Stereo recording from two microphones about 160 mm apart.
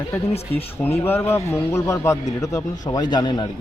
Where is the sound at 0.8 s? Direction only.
15° left (ahead or behind).